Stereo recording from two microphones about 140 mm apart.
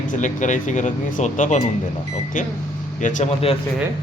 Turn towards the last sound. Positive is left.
turn(degrees=65)  # may be behind; listen again after turning